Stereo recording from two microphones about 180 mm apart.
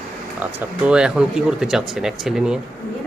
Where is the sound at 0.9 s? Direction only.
5° right (ahead or behind).